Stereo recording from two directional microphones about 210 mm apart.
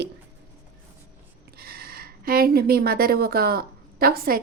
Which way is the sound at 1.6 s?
45° right (ahead or behind).